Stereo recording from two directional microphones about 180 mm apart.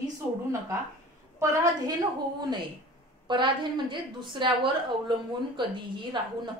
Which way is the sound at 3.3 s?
25° right (ahead or behind).